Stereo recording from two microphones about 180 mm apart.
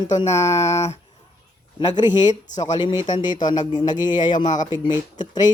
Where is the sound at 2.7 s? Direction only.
25° left (ahead or behind).